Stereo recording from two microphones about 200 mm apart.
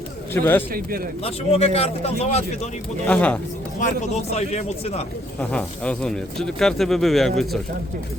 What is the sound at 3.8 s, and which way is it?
Speech, 35° left (ahead or behind).